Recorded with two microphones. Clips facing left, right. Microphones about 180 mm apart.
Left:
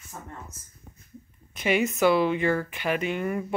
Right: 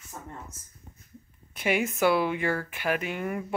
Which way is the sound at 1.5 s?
10° right (ahead or behind).